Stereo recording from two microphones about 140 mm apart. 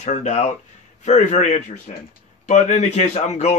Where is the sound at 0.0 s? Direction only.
55° left (ahead or behind).